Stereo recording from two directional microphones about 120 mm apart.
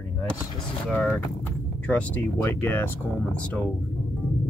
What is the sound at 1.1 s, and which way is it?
Speech, 15° left (ahead or behind).